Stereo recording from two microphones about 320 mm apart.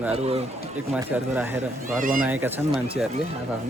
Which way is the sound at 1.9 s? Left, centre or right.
Right.